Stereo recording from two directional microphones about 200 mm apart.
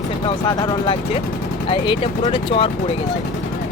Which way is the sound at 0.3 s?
20° left (ahead or behind).